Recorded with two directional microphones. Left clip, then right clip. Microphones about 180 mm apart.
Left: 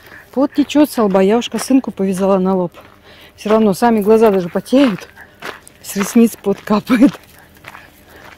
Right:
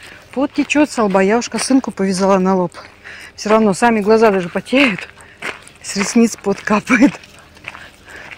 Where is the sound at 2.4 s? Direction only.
5° left (ahead or behind).